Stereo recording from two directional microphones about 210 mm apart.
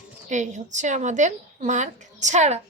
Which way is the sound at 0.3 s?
35° right (ahead or behind).